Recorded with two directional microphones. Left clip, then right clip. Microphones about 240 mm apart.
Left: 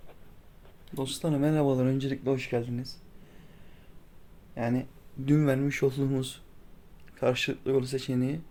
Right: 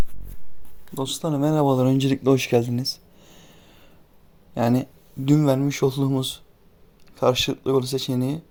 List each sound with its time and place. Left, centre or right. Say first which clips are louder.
0.9 s speech: right 5 dB; centre; by 2.8 s right
4.7 s speech: right 8 dB; right